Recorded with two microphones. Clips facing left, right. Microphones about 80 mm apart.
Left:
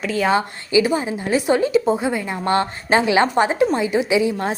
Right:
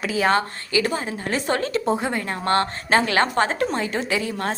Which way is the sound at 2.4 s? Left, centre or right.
Centre.